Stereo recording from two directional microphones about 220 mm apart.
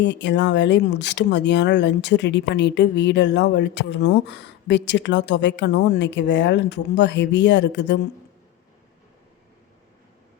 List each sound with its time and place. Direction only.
0.0 s speech: 55° left (ahead or behind)